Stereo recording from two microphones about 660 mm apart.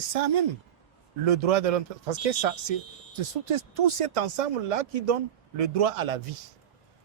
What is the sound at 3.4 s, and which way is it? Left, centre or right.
Speech, right.